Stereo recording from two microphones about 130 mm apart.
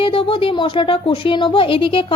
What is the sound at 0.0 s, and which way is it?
A woman's voice, 45° left (ahead or behind).